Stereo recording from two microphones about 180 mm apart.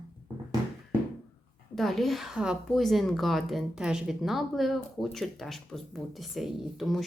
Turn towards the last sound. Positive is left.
turn(degrees=0)  # may be behind; listen again after turning